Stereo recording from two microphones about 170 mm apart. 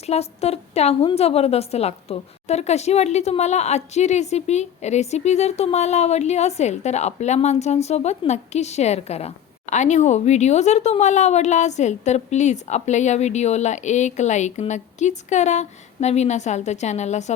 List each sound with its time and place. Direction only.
0.0 s a woman's voice: 40° left (ahead or behind)